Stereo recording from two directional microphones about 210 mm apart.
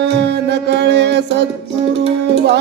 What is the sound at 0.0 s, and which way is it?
Music, 55° right (ahead or behind).